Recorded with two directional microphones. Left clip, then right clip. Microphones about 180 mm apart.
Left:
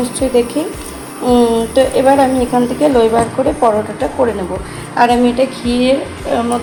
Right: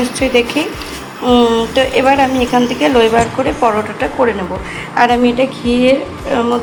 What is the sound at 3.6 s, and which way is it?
A woman's voice, 5° right (ahead or behind).